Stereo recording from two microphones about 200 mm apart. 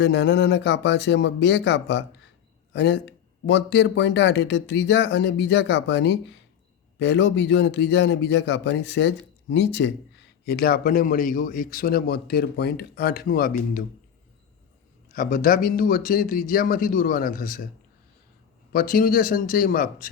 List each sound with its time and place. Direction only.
0.0 s a man's voice: 60° left (ahead or behind)
15.1 s a man's voice: 45° left (ahead or behind)
18.7 s a man's voice: 45° left (ahead or behind)